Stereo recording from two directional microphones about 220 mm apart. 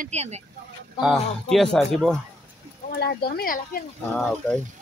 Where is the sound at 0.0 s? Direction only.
30° right (ahead or behind).